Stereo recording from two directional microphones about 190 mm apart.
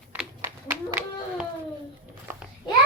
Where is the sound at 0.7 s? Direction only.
10° right (ahead or behind).